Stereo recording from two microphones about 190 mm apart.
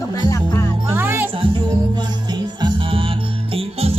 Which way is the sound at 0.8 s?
10° right (ahead or behind).